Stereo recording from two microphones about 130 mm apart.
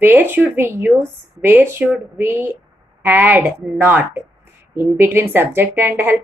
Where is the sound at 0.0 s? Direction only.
15° right (ahead or behind).